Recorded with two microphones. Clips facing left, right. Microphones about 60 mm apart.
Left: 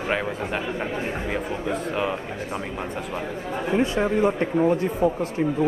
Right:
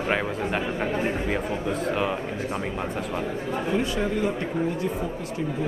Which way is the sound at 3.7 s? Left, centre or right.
Left.